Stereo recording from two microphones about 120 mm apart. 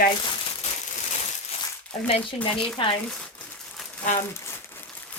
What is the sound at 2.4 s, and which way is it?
Speech, 40° left (ahead or behind).